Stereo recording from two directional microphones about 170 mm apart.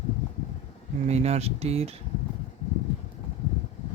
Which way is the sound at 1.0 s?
40° right (ahead or behind).